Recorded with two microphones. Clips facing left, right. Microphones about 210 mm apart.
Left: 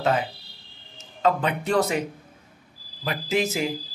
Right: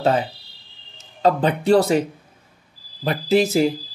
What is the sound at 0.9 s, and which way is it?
A man's voice, 35° right (ahead or behind).